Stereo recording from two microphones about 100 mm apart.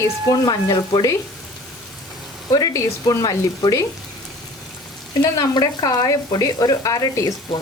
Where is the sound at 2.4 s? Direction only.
40° left (ahead or behind).